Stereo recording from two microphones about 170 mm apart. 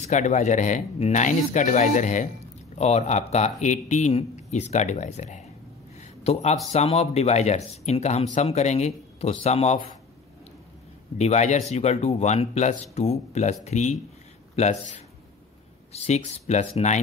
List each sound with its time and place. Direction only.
0.0 s speech: 45° left (ahead or behind)
11.1 s a man's voice: 40° left (ahead or behind)
15.9 s speech: 40° left (ahead or behind)